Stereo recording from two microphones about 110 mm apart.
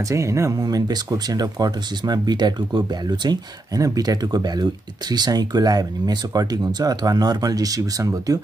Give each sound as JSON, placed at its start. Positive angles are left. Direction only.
{"t": 0.1, "sound": "speech", "side_deg": -25}